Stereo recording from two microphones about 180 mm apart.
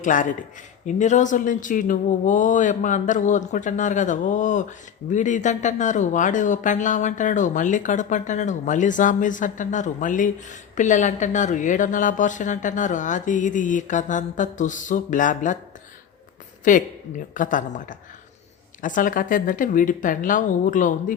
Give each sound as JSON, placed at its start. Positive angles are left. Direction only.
{"t": 0.0, "sound": "speech", "side_deg": 45}
{"t": 16.7, "sound": "speech", "side_deg": 45}